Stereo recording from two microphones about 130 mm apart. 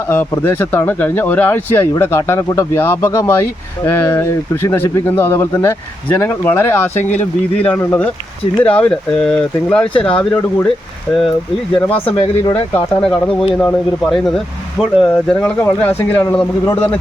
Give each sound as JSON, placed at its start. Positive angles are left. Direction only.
{"t": 0.1, "sound": "speech", "side_deg": 15}
{"t": 9.8, "sound": "speech", "side_deg": 40}
{"t": 11.9, "sound": "speech", "side_deg": 45}
{"t": 13.0, "sound": "speech", "side_deg": 5}